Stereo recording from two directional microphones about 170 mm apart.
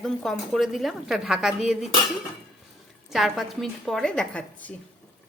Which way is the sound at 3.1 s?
Centre (ahead or behind).